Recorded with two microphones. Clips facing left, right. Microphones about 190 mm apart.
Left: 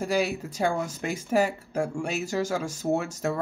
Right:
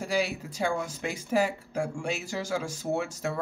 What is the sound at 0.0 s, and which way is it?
Speech, 45° left (ahead or behind).